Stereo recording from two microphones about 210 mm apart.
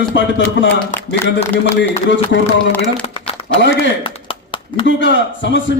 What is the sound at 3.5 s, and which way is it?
A man's voice, 60° left (ahead or behind).